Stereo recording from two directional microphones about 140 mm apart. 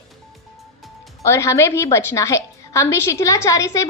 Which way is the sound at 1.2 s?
20° left (ahead or behind).